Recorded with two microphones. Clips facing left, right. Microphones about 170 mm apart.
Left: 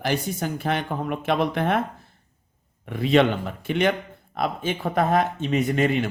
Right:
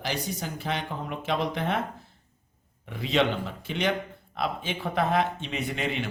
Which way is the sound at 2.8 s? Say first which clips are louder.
Left 6 dB; 55° left (ahead or behind).